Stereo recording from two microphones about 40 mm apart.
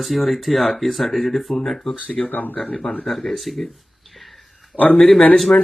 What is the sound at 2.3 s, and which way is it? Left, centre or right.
Speech, left.